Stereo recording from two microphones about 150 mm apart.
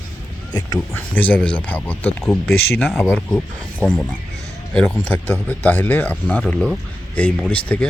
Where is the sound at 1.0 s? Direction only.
10° left (ahead or behind).